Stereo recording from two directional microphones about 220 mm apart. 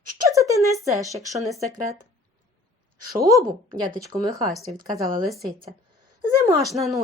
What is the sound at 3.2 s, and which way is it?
Speech, 15° right (ahead or behind).